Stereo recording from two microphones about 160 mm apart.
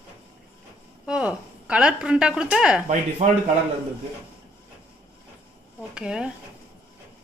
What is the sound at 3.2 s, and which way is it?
Speech, 50° right (ahead or behind).